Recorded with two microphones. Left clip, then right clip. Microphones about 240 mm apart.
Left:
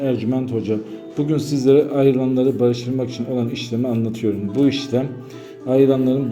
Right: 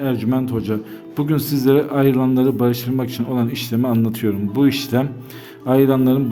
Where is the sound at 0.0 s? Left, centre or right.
Right.